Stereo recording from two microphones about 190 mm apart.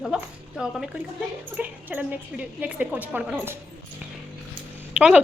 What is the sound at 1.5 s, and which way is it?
A woman's voice, 10° right (ahead or behind).